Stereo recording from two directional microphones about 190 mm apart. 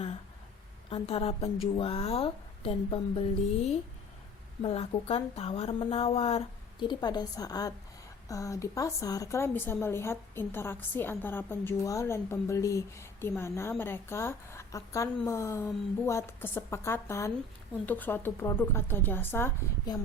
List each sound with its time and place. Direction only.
0.9 s a woman's voice: 30° left (ahead or behind)
4.6 s a woman's voice: 30° left (ahead or behind); by 20.0 s 15° left (ahead or behind)